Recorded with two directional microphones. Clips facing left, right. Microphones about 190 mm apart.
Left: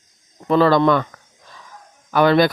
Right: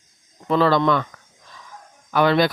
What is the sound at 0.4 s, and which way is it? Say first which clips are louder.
Speech: left 3 dB; 45° left (ahead or behind).